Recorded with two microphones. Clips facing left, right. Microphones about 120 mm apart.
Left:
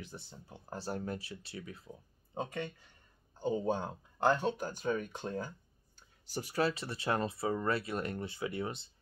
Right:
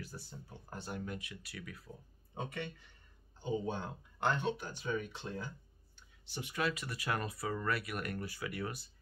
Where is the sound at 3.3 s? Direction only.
45° left (ahead or behind).